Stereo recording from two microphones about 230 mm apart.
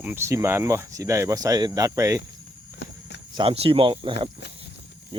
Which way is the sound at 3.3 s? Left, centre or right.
Right.